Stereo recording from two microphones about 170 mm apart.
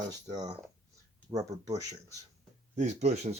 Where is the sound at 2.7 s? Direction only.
45° right (ahead or behind).